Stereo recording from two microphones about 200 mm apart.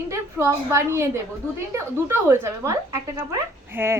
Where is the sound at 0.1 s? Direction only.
15° right (ahead or behind).